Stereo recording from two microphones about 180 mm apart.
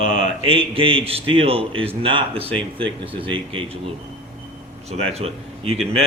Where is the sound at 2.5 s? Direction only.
5° left (ahead or behind).